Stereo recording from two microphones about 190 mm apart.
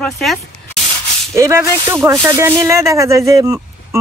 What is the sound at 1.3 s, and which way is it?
Speech, 15° right (ahead or behind).